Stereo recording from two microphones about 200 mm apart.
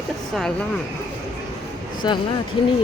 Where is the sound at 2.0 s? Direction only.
20° left (ahead or behind).